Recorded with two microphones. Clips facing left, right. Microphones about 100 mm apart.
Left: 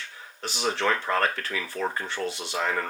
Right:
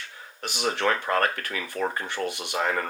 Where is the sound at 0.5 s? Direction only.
15° right (ahead or behind).